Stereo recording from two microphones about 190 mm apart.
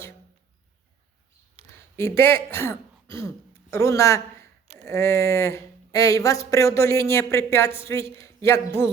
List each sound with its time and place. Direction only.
2.0 s speech: 15° left (ahead or behind)